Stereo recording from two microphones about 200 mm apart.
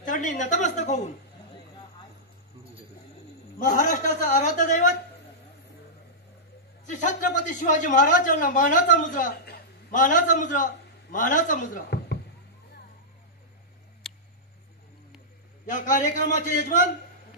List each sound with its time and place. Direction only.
0.0 s speech: 40° left (ahead or behind)
3.6 s speech: 40° left (ahead or behind)
6.9 s speech: 40° left (ahead or behind)
14.0 s a sound: centre (ahead or behind)
15.7 s speech: 40° left (ahead or behind)